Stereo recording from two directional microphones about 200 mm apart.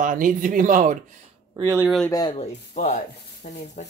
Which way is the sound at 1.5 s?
15° right (ahead or behind).